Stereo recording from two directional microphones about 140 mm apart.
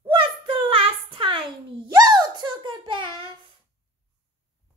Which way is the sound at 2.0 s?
30° right (ahead or behind).